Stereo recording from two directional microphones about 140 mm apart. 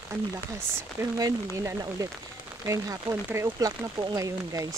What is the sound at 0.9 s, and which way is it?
Speech, 25° right (ahead or behind).